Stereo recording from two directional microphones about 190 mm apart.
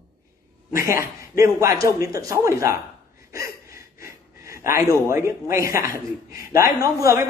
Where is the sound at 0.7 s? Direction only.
15° right (ahead or behind).